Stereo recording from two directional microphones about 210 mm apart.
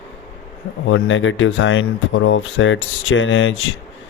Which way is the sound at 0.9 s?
65° left (ahead or behind).